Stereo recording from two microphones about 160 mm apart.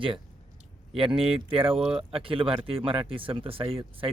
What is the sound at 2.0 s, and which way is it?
Speech, 35° right (ahead or behind).